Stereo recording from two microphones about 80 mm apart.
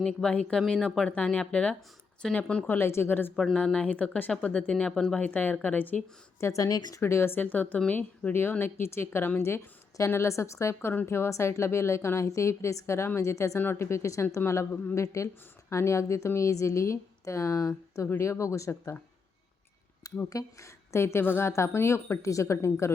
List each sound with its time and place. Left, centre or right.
0.0 s speech: centre
2.6 s speech: left
3.3 s speech: centre
4.7 s speech: centre
5.2 s speech: left
6.4 s speech: left
7.0 s speech: left
20.3 s speech: left